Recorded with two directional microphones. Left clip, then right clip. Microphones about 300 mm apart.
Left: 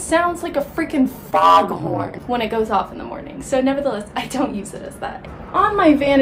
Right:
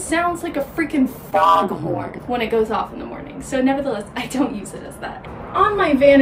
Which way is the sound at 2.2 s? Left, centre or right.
Centre.